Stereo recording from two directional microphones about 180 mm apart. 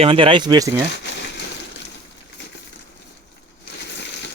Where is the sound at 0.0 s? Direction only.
30° right (ahead or behind).